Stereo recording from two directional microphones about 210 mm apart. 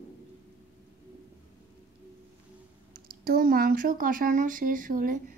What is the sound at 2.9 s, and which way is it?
Speech, 45° right (ahead or behind).